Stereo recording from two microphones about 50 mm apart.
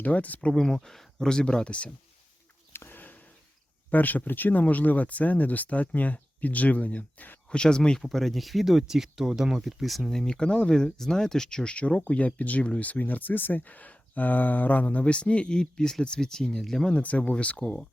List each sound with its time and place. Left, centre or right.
0.0 s speech: left
0.5 s speech: centre
2.7 s a sound: left
3.9 s speech: left
7.5 s speech: centre
8.0 s speech: centre
16.9 s speech: left